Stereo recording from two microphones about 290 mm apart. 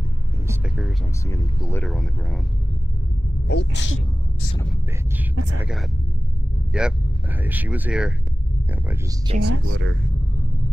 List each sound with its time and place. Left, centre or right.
0.5 s a sound: centre
1.3 s speech: centre
3.4 s speech: left
5.6 s speech: centre
9.4 s speech: right